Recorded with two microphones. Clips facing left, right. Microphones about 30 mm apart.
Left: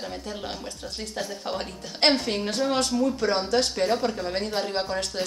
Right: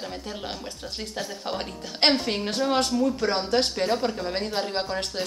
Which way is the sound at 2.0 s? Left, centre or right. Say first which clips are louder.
Even; right.